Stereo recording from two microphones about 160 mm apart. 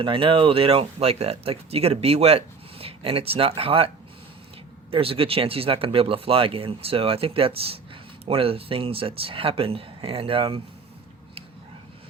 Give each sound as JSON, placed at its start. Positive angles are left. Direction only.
{"t": 0.0, "sound": "speech", "side_deg": -35}